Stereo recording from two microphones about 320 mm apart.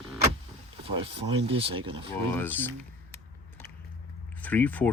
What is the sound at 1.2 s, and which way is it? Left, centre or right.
Speech, centre.